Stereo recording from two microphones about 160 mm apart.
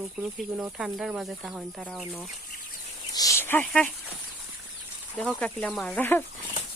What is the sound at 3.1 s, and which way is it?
Speech, 20° left (ahead or behind).